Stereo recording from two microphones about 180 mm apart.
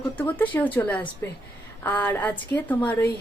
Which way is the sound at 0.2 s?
10° left (ahead or behind).